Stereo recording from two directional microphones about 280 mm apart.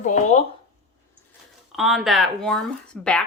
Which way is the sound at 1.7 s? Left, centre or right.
Centre.